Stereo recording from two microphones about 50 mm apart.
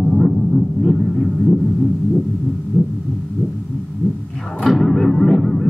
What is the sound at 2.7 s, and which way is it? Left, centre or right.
Heart sounds, left.